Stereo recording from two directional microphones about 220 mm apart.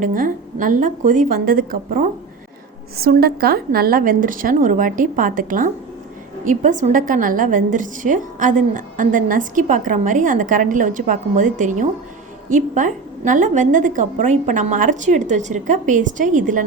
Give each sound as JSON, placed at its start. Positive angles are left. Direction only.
{"t": 0.0, "sound": "a woman's voice", "side_deg": -40}